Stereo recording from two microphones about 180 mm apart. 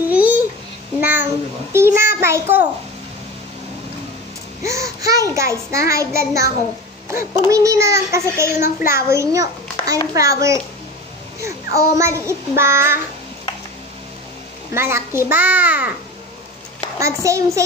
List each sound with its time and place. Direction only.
0.1 s babbling: 10° right (ahead or behind)
1.0 s a sound: 10° right (ahead or behind)
4.6 s a child's voice: 15° right (ahead or behind)
14.7 s a child's voice: 15° right (ahead or behind)
17.0 s a child's voice: 15° right (ahead or behind)